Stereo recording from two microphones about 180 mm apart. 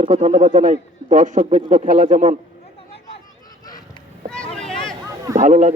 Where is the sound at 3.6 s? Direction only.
20° left (ahead or behind).